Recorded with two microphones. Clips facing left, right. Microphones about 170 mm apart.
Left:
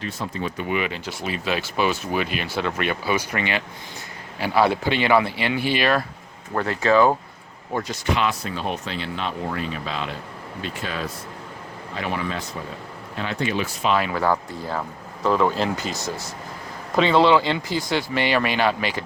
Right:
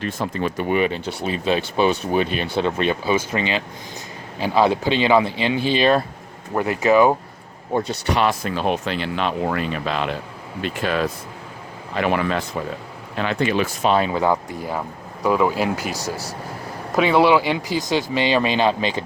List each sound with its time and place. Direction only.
0.0 s speech: 65° right (ahead or behind)
0.5 s speech: 40° right (ahead or behind); by 7.2 s 15° right (ahead or behind)
7.7 s speech: 30° right (ahead or behind)
7.9 s speech: 55° right (ahead or behind)
13.8 s speech: 35° right (ahead or behind)
14.1 s speech: 20° right (ahead or behind)